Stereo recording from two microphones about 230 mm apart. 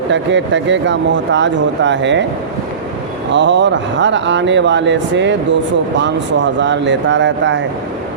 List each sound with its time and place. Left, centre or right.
0.1 s speech: right
3.3 s speech: right